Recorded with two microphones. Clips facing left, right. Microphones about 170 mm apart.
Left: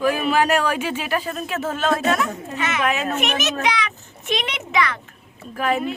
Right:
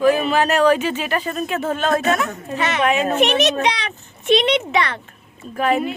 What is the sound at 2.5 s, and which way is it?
Speech, 35° right (ahead or behind).